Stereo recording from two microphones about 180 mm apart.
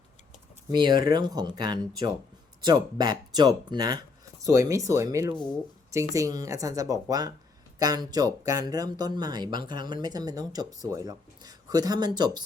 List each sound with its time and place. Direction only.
0.7 s speech: 25° right (ahead or behind)